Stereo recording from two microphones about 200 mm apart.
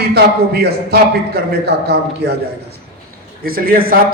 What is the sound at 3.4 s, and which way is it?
Speech, 45° right (ahead or behind).